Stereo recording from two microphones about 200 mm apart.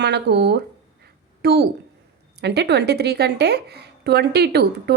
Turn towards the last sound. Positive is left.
turn(degrees=-55)  # may be behind; listen again after turning